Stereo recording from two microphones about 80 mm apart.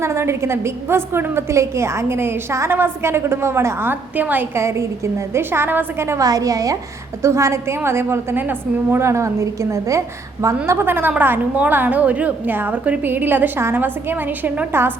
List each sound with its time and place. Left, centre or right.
0.0 s a woman's voice: right
4.5 s a woman's voice: right
6.2 s a woman's voice: right